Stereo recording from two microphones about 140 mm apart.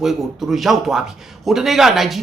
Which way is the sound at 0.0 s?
Centre (ahead or behind).